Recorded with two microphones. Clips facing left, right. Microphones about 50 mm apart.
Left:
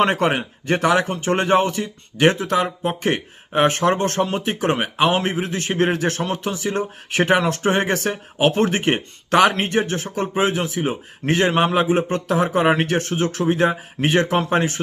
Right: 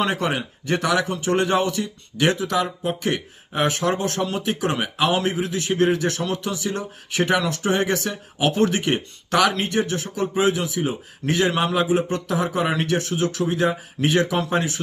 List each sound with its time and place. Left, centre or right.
0.0 s speech: left